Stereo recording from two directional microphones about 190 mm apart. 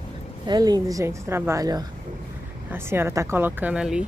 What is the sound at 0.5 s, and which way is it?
A woman's voice, 20° right (ahead or behind).